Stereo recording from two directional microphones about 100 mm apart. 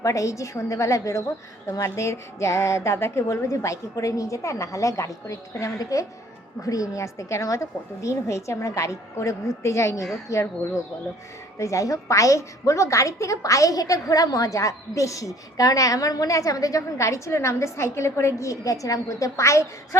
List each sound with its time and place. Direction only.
0.0 s a woman's voice: 30° left (ahead or behind)